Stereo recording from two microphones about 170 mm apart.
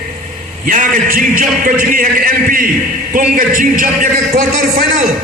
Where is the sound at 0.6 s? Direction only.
50° right (ahead or behind).